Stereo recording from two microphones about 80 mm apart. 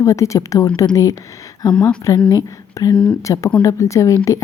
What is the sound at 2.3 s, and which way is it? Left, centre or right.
A woman's voice, left.